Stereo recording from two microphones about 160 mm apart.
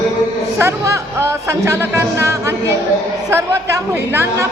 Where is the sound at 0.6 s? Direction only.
15° right (ahead or behind).